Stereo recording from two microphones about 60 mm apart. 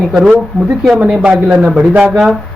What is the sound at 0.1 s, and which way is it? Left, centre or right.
Speech, centre.